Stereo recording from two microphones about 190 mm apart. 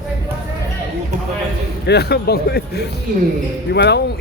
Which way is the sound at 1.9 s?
60° left (ahead or behind).